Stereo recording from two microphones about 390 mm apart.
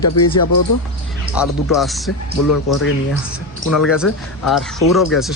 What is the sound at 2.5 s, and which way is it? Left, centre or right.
Speech, left.